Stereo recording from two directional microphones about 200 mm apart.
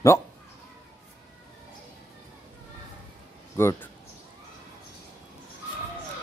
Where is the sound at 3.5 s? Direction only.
10° left (ahead or behind).